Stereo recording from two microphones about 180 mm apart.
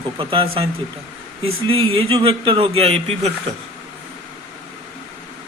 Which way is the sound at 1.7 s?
30° right (ahead or behind).